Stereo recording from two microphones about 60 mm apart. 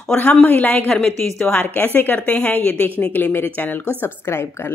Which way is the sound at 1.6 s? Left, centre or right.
Left.